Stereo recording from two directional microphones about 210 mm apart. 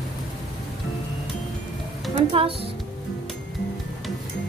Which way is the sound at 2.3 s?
25° right (ahead or behind).